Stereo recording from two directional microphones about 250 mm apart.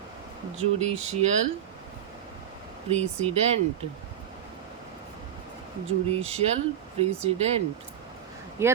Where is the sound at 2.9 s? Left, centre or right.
Right.